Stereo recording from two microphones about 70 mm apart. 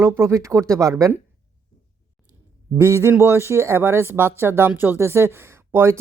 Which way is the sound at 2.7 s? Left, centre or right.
Right.